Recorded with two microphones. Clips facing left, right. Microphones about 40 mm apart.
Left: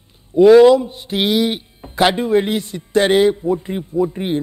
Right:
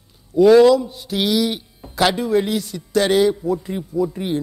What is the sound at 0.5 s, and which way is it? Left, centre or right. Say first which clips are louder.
Speech: left 3 dB; left.